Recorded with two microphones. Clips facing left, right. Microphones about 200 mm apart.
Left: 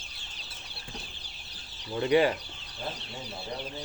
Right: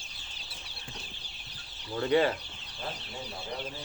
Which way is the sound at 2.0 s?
15° left (ahead or behind).